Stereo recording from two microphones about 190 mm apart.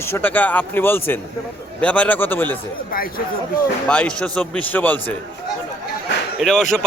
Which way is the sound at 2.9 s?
50° left (ahead or behind).